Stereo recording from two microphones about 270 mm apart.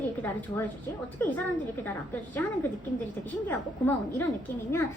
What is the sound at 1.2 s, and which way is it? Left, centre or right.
Speech, centre.